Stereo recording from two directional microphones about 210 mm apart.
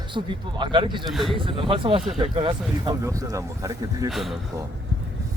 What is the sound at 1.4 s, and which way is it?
A man's voice, 25° right (ahead or behind).